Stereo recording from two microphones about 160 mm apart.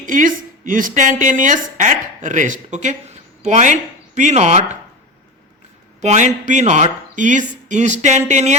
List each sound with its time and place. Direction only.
0.0 s a woman's voice: 55° right (ahead or behind)
6.0 s a woman's voice: 45° right (ahead or behind)